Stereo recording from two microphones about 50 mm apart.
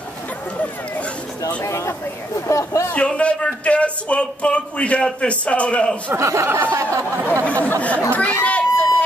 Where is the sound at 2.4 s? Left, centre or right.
Left.